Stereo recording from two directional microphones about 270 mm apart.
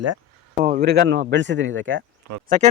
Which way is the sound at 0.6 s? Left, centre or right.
Right.